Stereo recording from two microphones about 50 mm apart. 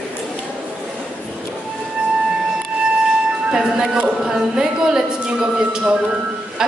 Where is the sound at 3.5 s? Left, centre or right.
Centre.